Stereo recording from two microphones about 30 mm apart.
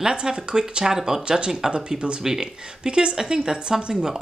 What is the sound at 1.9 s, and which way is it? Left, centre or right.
Speech, right.